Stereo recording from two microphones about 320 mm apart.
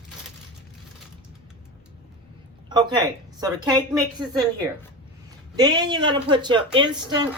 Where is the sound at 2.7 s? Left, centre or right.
Centre.